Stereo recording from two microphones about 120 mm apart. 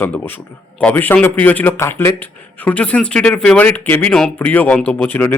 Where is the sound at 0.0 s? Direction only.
15° left (ahead or behind).